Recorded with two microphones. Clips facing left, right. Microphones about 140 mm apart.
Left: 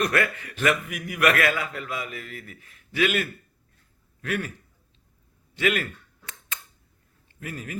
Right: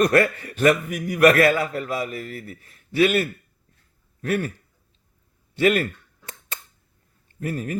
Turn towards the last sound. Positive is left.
turn(degrees=-40)  # may be behind; listen again after turning